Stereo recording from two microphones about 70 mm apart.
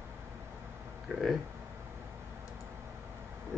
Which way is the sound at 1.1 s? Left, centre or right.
Right.